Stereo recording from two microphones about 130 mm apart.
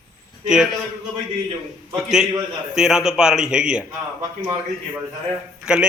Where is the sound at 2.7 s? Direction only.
5° right (ahead or behind).